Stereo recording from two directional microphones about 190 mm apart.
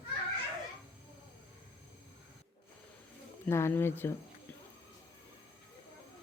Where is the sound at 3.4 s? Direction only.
10° left (ahead or behind).